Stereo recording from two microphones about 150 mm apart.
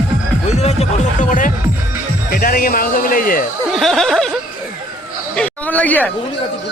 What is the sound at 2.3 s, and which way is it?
Speech, 75° left (ahead or behind).